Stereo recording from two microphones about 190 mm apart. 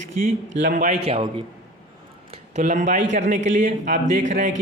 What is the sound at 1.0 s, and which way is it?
Speech, 30° right (ahead or behind).